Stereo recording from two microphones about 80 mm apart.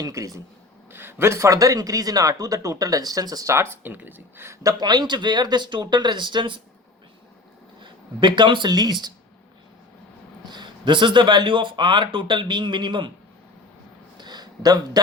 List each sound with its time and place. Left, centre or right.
0.0 s a man's voice: right
0.9 s a man's voice: right
3.8 s speech: right
4.6 s speech: right
7.8 s a man's voice: right
8.7 s speech: right
10.4 s speech: right
14.2 s a sound: right